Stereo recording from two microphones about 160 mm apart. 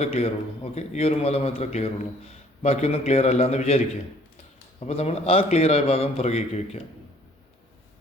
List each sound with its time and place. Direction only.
0.0 s a man's voice: 40° left (ahead or behind)
4.9 s a man's voice: 40° left (ahead or behind)